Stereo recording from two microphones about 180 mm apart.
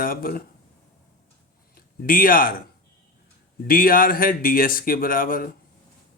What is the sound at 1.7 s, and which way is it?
Speech, 50° left (ahead or behind).